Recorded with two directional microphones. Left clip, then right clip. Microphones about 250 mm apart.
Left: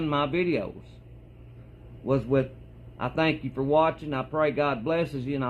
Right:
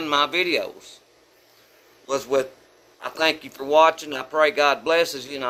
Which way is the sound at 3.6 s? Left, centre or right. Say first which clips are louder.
Right 7 dB; centre.